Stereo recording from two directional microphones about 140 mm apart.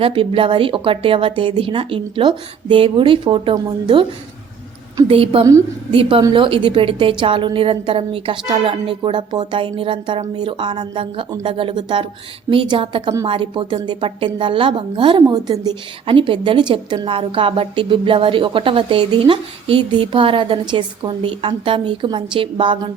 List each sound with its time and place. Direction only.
0.0 s a woman's voice: 40° right (ahead or behind)
5.0 s a woman's voice: 40° right (ahead or behind)